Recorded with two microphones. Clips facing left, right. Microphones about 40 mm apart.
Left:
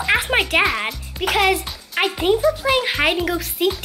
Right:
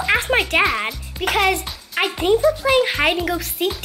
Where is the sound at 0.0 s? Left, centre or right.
Centre.